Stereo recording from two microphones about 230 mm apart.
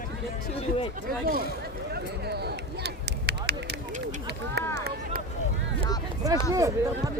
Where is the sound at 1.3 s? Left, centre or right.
Right.